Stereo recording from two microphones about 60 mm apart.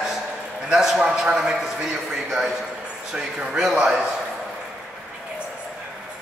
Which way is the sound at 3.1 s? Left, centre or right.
Centre.